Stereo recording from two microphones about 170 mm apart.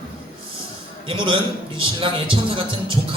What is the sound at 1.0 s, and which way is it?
A man's voice, 30° right (ahead or behind).